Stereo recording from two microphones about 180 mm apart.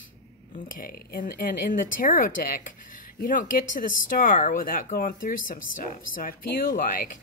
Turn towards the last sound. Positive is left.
turn(degrees=50)  # may be behind; listen again after turning